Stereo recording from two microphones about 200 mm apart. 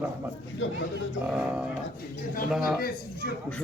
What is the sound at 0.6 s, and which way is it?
Speech, 70° left (ahead or behind).